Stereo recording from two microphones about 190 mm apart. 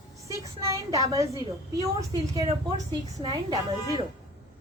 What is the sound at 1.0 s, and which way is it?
A woman's voice, 15° right (ahead or behind).